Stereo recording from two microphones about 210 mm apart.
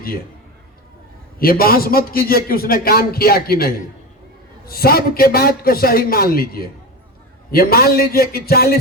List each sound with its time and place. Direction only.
1.4 s a man's voice: 45° left (ahead or behind)